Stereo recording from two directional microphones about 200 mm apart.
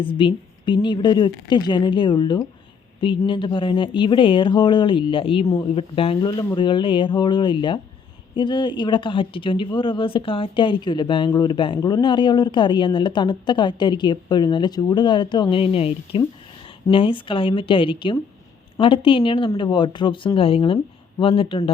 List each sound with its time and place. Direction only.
0.0 s speech: 25° left (ahead or behind)